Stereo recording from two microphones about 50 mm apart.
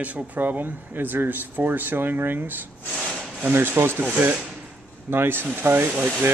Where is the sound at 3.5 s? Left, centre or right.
Right.